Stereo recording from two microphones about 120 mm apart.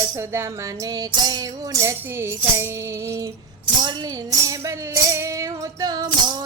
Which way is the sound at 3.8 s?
35° right (ahead or behind).